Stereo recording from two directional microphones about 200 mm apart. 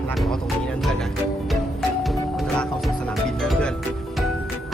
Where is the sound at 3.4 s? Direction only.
Centre (ahead or behind).